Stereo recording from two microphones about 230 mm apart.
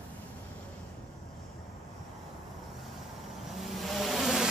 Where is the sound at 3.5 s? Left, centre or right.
Centre.